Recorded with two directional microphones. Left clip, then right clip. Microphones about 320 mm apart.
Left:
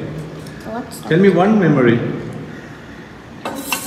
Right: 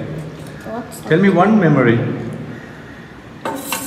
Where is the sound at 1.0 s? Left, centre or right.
Right.